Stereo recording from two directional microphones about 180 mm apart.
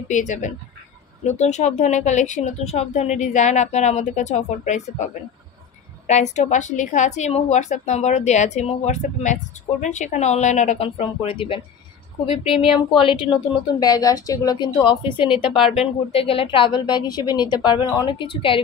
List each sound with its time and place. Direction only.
0.1 s a woman's voice: 45° left (ahead or behind); by 15.3 s 25° left (ahead or behind)
15.3 s speech: 5° right (ahead or behind)
15.7 s speech: 35° left (ahead or behind)